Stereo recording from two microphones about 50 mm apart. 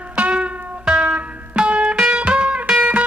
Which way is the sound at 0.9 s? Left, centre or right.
Right.